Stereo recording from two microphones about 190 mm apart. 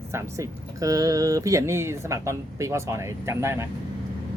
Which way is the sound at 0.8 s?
20° right (ahead or behind).